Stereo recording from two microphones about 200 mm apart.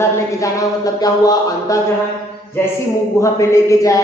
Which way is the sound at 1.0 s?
20° left (ahead or behind).